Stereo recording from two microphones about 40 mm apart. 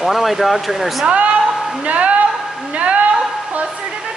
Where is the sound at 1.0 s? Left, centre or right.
Right.